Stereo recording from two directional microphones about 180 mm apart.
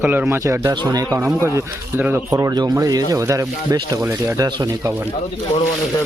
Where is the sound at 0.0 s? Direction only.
10° right (ahead or behind).